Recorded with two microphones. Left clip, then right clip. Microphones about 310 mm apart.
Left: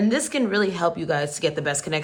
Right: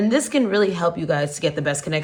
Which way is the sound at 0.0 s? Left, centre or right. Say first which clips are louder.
Right 3 dB; centre.